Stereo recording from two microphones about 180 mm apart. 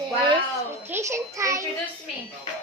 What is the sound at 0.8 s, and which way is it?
Speech, 15° right (ahead or behind).